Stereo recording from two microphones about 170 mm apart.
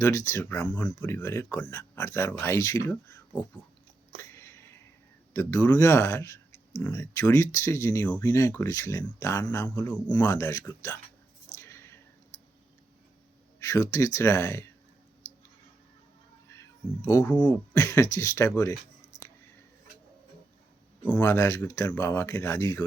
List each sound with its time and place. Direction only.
0.0 s speech: 15° left (ahead or behind)
4.3 s a sound: 15° left (ahead or behind)
5.3 s speech: 15° left (ahead or behind)
11.7 s a sound: 15° left (ahead or behind)
13.6 s speech: 20° left (ahead or behind)
16.5 s speech: 15° left (ahead or behind)
21.0 s speech: 10° left (ahead or behind)